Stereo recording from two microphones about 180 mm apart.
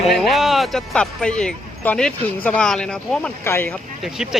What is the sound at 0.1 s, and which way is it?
Speech, centre (ahead or behind).